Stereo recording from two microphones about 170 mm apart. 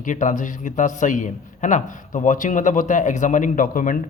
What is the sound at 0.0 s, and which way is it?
A man's voice, 50° left (ahead or behind).